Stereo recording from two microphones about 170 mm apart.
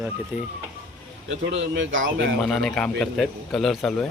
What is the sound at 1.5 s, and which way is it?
Speech, 90° right.